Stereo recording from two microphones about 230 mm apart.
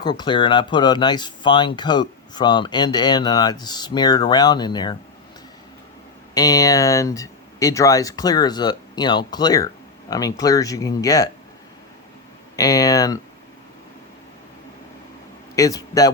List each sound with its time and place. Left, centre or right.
0.0 s speech: centre
6.3 s speech: centre
12.5 s speech: centre
15.5 s speech: centre